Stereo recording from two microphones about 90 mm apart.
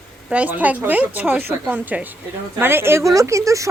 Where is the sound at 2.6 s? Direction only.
25° right (ahead or behind).